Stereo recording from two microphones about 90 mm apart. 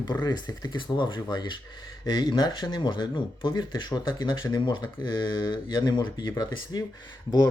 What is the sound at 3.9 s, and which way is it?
Speech, 50° left (ahead or behind).